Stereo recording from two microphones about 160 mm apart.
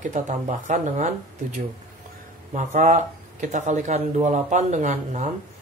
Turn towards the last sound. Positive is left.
turn(degrees=-50)  # may be behind; listen again after turning